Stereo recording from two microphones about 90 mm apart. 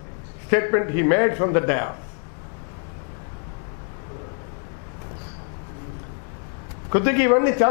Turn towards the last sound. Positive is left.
turn(degrees=15)  # may be behind; listen again after turning